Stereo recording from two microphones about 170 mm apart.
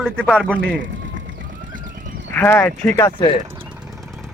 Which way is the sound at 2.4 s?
10° left (ahead or behind).